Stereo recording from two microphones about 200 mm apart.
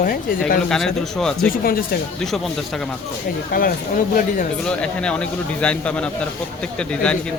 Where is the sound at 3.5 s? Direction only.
45° left (ahead or behind).